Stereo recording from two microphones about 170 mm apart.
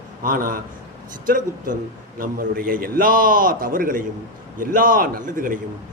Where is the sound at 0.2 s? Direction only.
55° right (ahead or behind).